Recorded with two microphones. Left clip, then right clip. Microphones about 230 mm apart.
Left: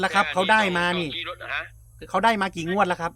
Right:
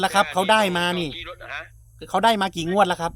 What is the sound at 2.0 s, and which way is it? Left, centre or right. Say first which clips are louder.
Speech: right 2 dB; right.